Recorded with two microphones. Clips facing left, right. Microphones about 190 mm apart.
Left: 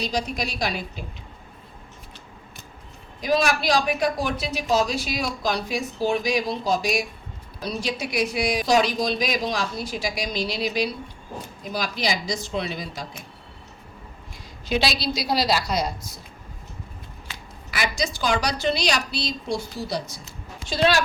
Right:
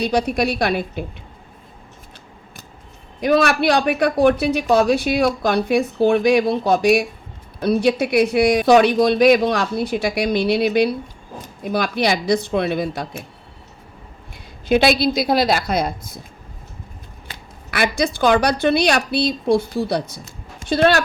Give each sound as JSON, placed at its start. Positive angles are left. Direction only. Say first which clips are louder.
{"t": 0.0, "sound": "speech", "louder": "right 8 dB", "side_deg": -60}
{"t": 3.2, "sound": "speech", "louder": "right 6 dB", "side_deg": -60}
{"t": 14.7, "sound": "a woman's voice", "louder": "right 9 dB", "side_deg": -55}
{"t": 17.7, "sound": "speech", "louder": "right 7 dB", "side_deg": -60}